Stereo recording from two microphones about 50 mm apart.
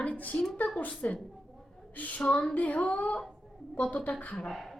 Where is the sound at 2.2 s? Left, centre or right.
Left.